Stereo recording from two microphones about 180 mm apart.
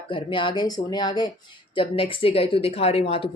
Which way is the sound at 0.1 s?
25° left (ahead or behind).